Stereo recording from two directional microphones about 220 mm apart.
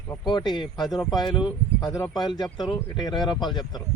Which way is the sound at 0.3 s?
20° left (ahead or behind).